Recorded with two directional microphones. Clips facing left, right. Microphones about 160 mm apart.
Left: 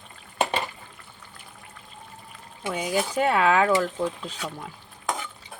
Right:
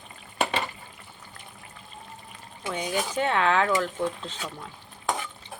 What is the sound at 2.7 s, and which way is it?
Speech, 10° left (ahead or behind).